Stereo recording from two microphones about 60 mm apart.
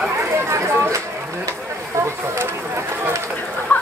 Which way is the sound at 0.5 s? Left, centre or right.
Right.